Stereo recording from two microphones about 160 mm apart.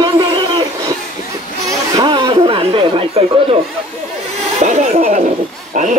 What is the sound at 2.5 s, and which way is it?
Chatter, 35° right (ahead or behind).